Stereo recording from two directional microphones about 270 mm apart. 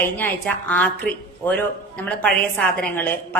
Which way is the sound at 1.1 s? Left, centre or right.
Left.